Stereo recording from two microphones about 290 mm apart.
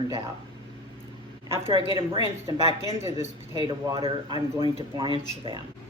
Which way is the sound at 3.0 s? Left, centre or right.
Centre.